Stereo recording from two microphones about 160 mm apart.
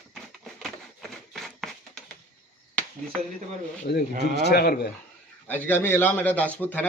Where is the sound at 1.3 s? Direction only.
Centre (ahead or behind).